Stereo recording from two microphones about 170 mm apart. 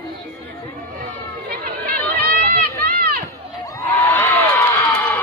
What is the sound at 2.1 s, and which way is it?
Run, 65° right (ahead or behind).